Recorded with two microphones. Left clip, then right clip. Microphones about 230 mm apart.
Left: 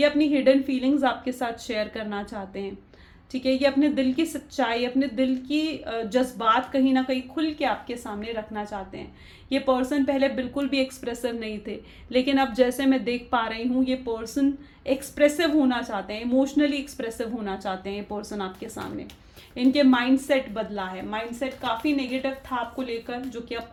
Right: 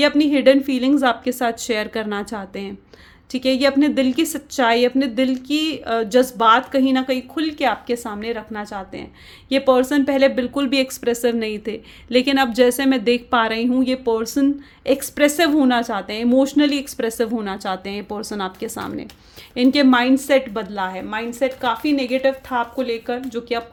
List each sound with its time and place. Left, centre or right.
0.0 s a woman's voice: right